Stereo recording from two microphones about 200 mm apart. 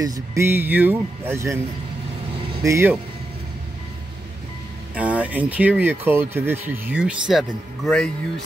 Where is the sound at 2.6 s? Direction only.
10° right (ahead or behind).